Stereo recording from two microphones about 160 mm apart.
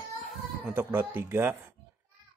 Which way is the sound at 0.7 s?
15° right (ahead or behind).